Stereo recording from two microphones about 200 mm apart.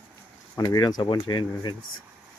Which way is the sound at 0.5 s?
20° left (ahead or behind).